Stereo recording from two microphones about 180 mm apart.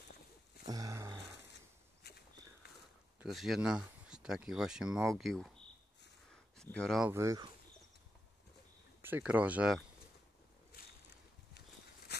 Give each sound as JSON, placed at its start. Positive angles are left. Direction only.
{"t": 0.7, "sound": "a sound", "side_deg": -20}
{"t": 2.0, "sound": "walk", "side_deg": 65}
{"t": 3.2, "sound": "speech", "side_deg": 0}
{"t": 6.3, "sound": "a sound", "side_deg": 5}
{"t": 7.1, "sound": "speech", "side_deg": -15}
{"t": 9.0, "sound": "speech", "side_deg": -10}